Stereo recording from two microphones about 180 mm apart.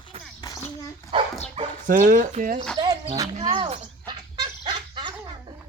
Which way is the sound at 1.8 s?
50° right (ahead or behind).